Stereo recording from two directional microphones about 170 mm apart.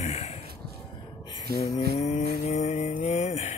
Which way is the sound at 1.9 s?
45° left (ahead or behind).